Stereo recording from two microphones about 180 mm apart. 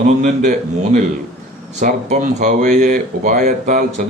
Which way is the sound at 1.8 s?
40° right (ahead or behind).